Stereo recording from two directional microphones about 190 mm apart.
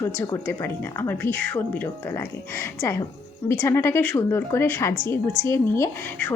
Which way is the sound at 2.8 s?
15° left (ahead or behind).